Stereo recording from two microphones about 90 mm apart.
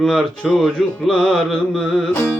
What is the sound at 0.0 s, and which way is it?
Speech, 5° left (ahead or behind).